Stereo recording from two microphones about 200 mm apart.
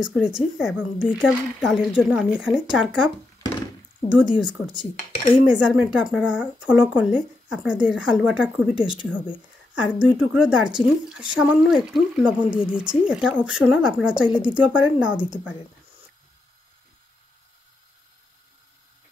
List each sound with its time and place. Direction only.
0.0 s speech: 5° right (ahead or behind)
4.1 s speech: 5° right (ahead or behind)
4.9 s speech: 30° left (ahead or behind)
5.4 s speech: 5° right (ahead or behind)